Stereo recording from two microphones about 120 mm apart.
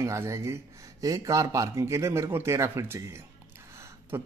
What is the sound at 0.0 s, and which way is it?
Speech, 25° right (ahead or behind).